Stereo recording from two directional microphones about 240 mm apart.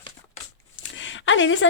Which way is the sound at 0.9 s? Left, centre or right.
Left.